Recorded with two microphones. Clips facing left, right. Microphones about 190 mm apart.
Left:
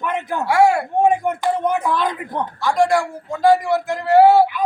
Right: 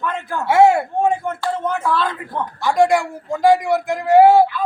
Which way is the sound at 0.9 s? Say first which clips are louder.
Left 2 dB; 15° left (ahead or behind).